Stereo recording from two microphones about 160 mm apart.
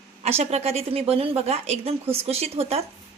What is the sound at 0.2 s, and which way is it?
A woman's voice, 40° right (ahead or behind).